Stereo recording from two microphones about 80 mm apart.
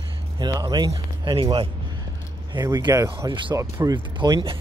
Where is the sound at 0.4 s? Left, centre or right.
Right.